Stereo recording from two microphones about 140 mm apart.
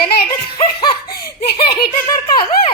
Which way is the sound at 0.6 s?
35° left (ahead or behind).